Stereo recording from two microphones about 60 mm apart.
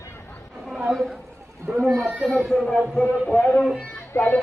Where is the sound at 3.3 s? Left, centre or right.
Centre.